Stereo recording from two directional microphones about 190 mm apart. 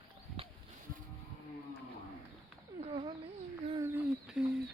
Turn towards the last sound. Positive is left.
turn(degrees=-5)  # may be behind; listen again after turning